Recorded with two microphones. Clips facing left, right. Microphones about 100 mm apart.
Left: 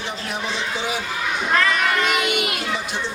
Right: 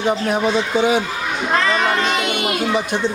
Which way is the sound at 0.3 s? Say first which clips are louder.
Right 9 dB; 50° right (ahead or behind).